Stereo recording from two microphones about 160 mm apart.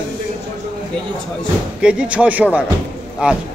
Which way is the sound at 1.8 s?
5° right (ahead or behind).